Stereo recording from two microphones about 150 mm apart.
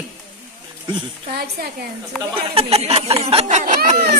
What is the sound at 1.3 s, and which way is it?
Speech, 90° right.